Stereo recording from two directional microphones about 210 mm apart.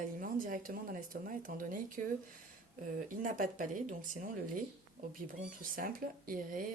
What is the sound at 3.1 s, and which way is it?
Speech, 40° right (ahead or behind).